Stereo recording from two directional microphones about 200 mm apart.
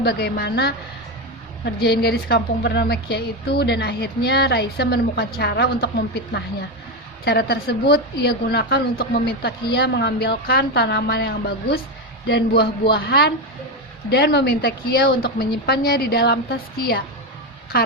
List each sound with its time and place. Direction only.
0.0 s a woman's voice: 55° left (ahead or behind)